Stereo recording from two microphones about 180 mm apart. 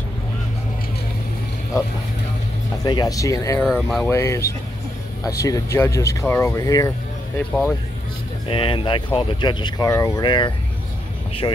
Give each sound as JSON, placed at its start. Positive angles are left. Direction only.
{"t": 2.8, "sound": "speech", "side_deg": 20}
{"t": 3.6, "sound": "speech", "side_deg": 0}
{"t": 4.1, "sound": "speech", "side_deg": 15}
{"t": 8.5, "sound": "speech", "side_deg": 30}